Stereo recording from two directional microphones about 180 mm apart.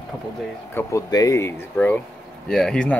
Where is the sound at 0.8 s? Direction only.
15° left (ahead or behind).